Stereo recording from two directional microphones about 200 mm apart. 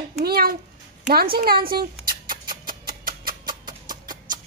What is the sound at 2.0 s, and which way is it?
Rodents, 45° right (ahead or behind).